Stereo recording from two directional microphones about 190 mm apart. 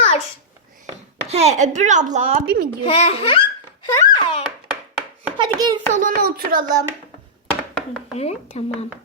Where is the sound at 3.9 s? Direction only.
20° left (ahead or behind).